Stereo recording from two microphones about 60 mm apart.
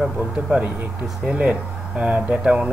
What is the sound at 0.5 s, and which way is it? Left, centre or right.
Speech, right.